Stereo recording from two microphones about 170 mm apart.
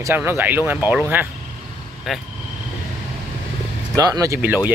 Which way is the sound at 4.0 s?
20° right (ahead or behind).